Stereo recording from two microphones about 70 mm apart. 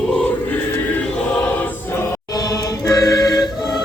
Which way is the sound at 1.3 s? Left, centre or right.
Left.